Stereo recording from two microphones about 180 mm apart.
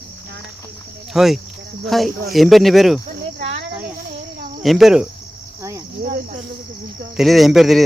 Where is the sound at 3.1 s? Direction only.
40° right (ahead or behind).